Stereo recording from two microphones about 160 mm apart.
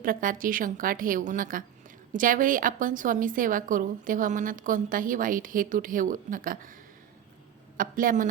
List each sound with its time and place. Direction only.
0.0 s a woman's voice: 60° right (ahead or behind)
7.8 s a woman's voice: 60° right (ahead or behind)